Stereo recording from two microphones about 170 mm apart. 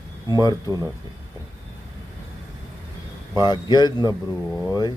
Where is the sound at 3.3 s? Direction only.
25° left (ahead or behind).